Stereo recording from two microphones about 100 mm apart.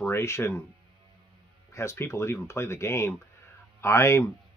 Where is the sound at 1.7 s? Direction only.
30° left (ahead or behind).